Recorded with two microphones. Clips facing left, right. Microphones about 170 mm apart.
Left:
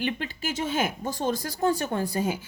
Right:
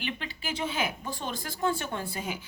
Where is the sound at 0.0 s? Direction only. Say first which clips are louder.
Left 6 dB; 45° left (ahead or behind).